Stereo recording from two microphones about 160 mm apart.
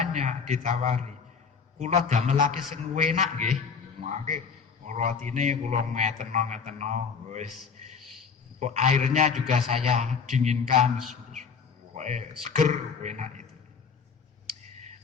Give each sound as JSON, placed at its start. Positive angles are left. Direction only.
{"t": 0.0, "sound": "a man's voice", "side_deg": -50}
{"t": 8.5, "sound": "a man's voice", "side_deg": -45}
{"t": 10.7, "sound": "a man's voice", "side_deg": -35}
{"t": 11.9, "sound": "a man's voice", "side_deg": -45}
{"t": 14.6, "sound": "clicking", "side_deg": -45}